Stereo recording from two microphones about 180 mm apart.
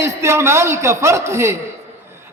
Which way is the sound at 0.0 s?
15° right (ahead or behind).